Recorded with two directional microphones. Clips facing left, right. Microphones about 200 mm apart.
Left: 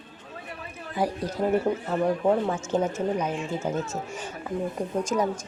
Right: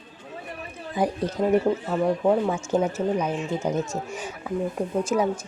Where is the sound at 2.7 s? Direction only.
10° right (ahead or behind).